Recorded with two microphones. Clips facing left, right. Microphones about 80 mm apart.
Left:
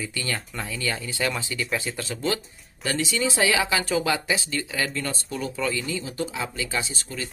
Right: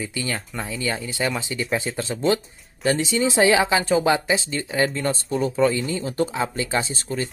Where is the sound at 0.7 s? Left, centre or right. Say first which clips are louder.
Right 3 dB; right.